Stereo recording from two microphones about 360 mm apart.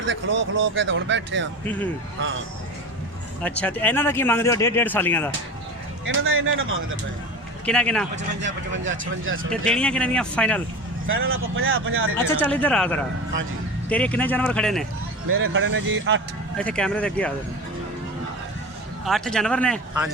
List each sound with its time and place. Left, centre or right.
0.0 s speech: right
3.4 s speech: centre
6.2 s speech: right
7.6 s speech: centre
8.4 s speech: right
9.5 s speech: centre
11.0 s speech: right
12.1 s speech: centre
15.3 s speech: right
16.6 s speech: centre
19.0 s speech: centre